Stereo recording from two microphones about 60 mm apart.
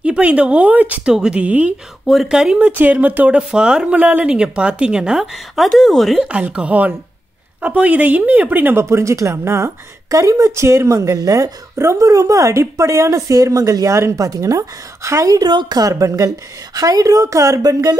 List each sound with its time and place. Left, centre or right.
0.0 s speech: right
1.0 s speech: centre
2.2 s a woman's voice: centre
2.6 s a woman's voice: right; by 6.2 s centre
6.2 s speech: centre
8.7 s speech: right
10.0 s a woman's voice: right
10.5 s a woman's voice: right
15.0 s a woman's voice: right
15.2 s a woman's voice: right
16.7 s a woman's voice: right